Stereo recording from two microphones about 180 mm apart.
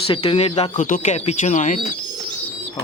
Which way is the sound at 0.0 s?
30° left (ahead or behind).